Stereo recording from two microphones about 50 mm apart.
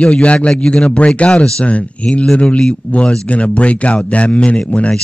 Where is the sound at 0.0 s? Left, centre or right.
Left.